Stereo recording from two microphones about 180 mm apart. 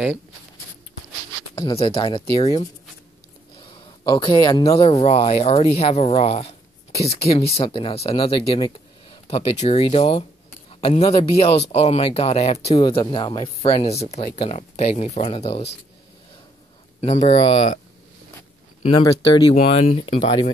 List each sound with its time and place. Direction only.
1.5 s speech: 30° left (ahead or behind)
4.0 s speech: 25° left (ahead or behind)
17.0 s speech: 35° left (ahead or behind)
19.0 s speech: 25° left (ahead or behind)
19.5 s speech: 40° left (ahead or behind)